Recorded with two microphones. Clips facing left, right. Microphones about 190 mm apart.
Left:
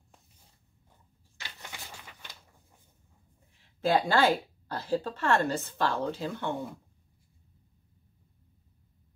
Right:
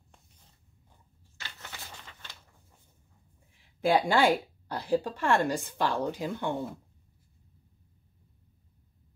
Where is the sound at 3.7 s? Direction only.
15° right (ahead or behind).